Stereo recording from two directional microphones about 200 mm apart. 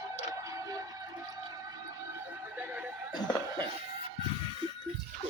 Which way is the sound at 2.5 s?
10° right (ahead or behind).